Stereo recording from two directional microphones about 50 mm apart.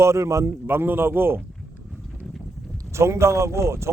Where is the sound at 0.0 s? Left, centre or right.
Right.